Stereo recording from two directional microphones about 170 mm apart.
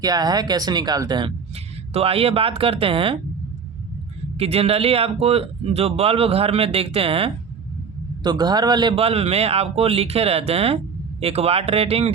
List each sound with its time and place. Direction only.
0.0 s speech: 25° right (ahead or behind)
1.9 s a man's voice: 35° right (ahead or behind)
4.4 s a man's voice: 35° right (ahead or behind)